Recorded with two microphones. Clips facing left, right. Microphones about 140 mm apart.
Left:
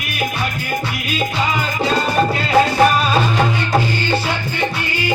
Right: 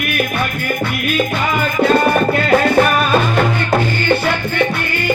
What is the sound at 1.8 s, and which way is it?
Music, 55° right (ahead or behind).